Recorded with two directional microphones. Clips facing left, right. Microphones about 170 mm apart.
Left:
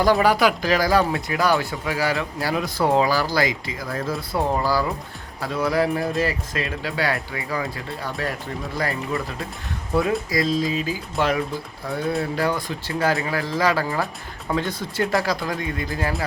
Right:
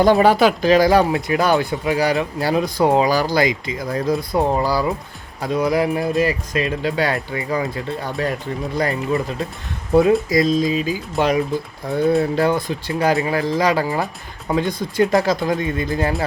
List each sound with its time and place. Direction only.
0.0 s speech: 25° right (ahead or behind)
12.4 s speech: 20° right (ahead or behind)